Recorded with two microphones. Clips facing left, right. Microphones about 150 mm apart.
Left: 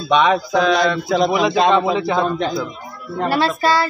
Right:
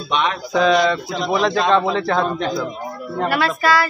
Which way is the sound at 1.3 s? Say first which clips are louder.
Right 2 dB; 10° left (ahead or behind).